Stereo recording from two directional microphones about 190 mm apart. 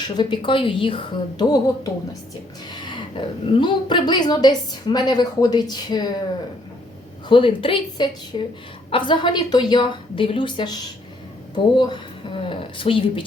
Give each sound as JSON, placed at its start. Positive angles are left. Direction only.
{"t": 0.2, "sound": "speech", "side_deg": 25}
{"t": 7.3, "sound": "speech", "side_deg": 25}